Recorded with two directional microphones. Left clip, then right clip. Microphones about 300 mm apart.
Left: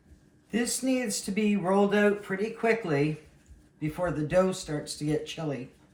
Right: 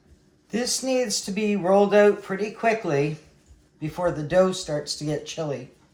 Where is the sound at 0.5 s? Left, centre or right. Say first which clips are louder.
Right 5 dB; centre.